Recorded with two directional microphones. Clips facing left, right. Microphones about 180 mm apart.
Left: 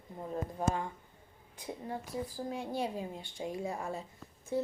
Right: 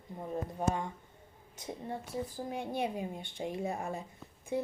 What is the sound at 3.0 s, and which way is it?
Speech, 25° right (ahead or behind).